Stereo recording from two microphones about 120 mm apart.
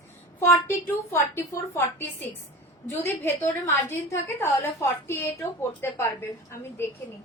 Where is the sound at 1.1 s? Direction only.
20° left (ahead or behind).